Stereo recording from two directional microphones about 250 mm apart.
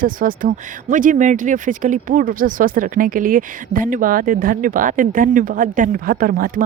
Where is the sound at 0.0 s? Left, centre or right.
Right.